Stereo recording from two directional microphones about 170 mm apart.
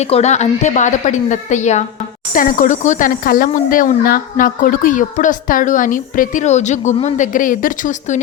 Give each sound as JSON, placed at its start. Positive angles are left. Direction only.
{"t": 0.0, "sound": "speech", "side_deg": 40}